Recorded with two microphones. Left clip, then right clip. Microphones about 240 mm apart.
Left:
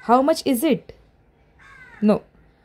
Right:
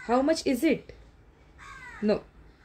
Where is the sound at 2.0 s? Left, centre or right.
Left.